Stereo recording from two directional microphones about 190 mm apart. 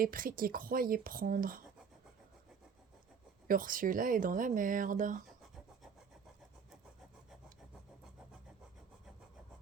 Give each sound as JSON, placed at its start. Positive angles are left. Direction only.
{"t": 0.0, "sound": "speech", "side_deg": -50}
{"t": 3.4, "sound": "speech", "side_deg": -45}